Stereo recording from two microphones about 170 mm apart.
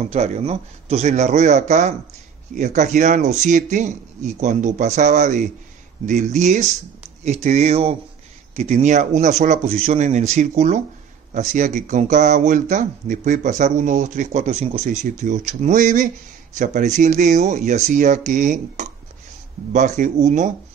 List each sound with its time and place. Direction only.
0.0 s speech: 40° right (ahead or behind)